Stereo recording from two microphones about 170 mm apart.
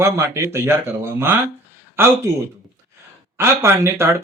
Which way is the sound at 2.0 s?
10° right (ahead or behind).